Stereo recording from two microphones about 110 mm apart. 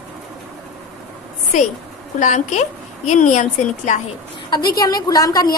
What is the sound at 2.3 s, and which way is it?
A woman's voice, 90° left.